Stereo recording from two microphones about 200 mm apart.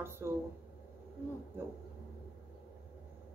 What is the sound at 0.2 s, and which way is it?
Speech, 10° right (ahead or behind).